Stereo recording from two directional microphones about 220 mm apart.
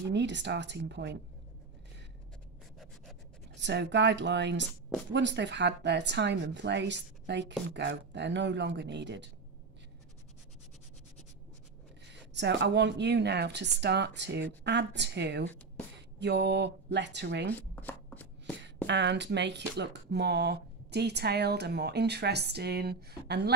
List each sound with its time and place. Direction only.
0.1 s speech: 55° right (ahead or behind)
3.5 s speech: 55° right (ahead or behind)
12.1 s speech: 50° right (ahead or behind)
17.6 s chopping: 10° left (ahead or behind)
18.9 s speech: 50° right (ahead or behind)